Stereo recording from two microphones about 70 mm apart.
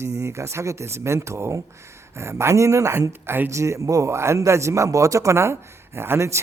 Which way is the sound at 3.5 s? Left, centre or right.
Right.